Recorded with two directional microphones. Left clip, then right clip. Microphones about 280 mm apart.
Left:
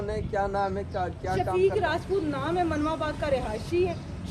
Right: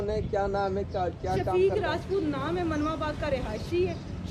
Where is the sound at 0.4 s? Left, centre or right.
Left.